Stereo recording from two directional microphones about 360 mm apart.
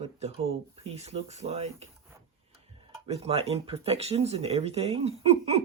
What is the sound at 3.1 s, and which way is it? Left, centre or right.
Speech, centre.